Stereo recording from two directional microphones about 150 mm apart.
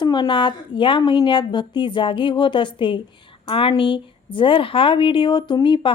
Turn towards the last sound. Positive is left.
turn(degrees=30)  # may be behind; listen again after turning